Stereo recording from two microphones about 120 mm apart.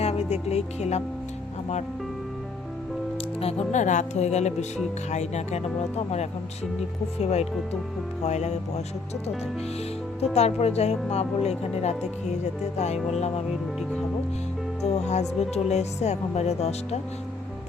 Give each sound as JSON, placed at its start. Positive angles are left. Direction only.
{"t": 0.0, "sound": "speech", "side_deg": 60}
{"t": 3.4, "sound": "a woman's voice", "side_deg": 70}
{"t": 10.3, "sound": "speech", "side_deg": 60}
{"t": 14.8, "sound": "speech", "side_deg": 65}